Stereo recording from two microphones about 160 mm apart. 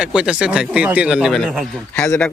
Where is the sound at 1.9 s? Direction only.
15° left (ahead or behind).